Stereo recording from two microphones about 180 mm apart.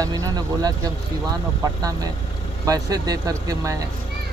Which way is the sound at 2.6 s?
20° right (ahead or behind).